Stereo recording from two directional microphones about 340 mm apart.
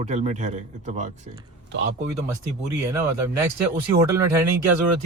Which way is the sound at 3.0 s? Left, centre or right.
Centre.